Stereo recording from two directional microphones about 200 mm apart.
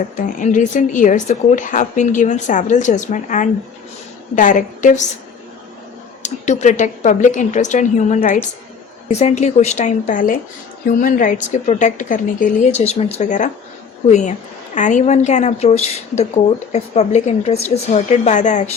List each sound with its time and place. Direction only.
0.2 s a woman's voice: 40° left (ahead or behind)
6.2 s a woman's voice: 35° left (ahead or behind)